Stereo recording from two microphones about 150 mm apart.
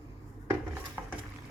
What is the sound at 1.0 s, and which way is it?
Patter, 15° right (ahead or behind).